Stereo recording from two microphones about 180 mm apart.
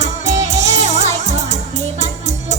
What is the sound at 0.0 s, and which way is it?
Music, 40° right (ahead or behind).